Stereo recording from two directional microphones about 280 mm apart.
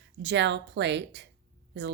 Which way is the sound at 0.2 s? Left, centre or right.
Right.